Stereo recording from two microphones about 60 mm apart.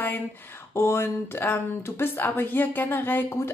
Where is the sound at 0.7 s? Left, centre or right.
Left.